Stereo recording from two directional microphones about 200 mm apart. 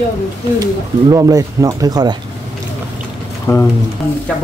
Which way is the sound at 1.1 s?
15° right (ahead or behind).